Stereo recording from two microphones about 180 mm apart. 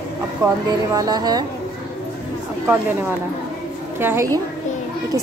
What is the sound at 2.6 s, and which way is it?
A woman's voice, 10° right (ahead or behind).